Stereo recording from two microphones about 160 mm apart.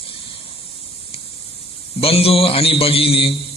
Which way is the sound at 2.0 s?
40° left (ahead or behind).